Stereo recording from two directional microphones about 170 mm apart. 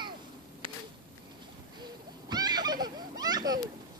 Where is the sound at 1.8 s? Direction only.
25° right (ahead or behind).